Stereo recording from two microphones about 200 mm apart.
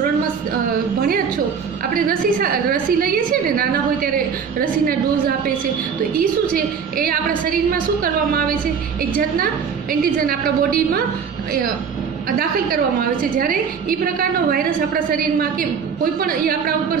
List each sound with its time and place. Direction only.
2.0 s a woman's voice: 45° right (ahead or behind)
6.5 s a woman's voice: 45° right (ahead or behind)
10.1 s a woman's voice: 45° right (ahead or behind)
12.4 s a woman's voice: 45° right (ahead or behind)
16.0 s a woman's voice: 45° right (ahead or behind)